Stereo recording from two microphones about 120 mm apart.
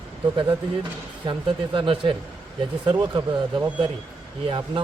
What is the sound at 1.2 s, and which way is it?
Speech, 45° right (ahead or behind).